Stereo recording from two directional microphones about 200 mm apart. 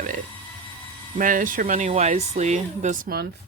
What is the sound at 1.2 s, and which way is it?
Speech, 40° right (ahead or behind).